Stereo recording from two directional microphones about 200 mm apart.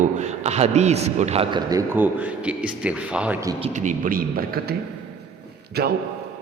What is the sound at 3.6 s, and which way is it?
Speech, 40° right (ahead or behind).